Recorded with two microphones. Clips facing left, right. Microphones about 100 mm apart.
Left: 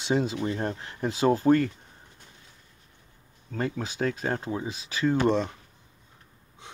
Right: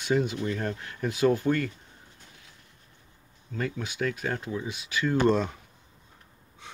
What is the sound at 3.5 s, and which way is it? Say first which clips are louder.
Speech: left 2 dB; 50° left (ahead or behind).